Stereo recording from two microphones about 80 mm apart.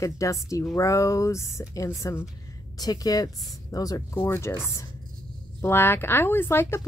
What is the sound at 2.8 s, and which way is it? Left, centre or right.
Speech, left.